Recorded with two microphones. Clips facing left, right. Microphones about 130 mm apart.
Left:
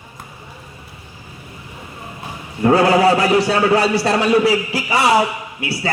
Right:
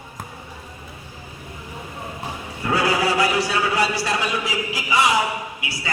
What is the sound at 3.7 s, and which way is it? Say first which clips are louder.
Speech: left 7 dB; 35° left (ahead or behind).